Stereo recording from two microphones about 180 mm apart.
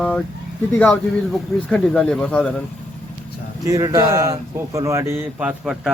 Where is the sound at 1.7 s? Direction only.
5° left (ahead or behind).